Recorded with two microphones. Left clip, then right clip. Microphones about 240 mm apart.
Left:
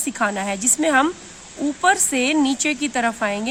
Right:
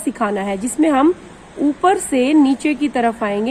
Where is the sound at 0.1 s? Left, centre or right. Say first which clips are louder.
Right 3 dB; left.